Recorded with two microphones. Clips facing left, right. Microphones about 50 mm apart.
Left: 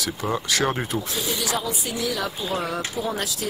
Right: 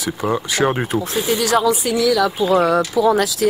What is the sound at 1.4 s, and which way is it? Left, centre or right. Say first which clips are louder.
A woman's voice: right 10 dB; right.